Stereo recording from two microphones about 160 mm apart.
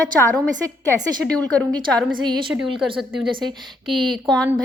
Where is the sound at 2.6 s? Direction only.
30° right (ahead or behind).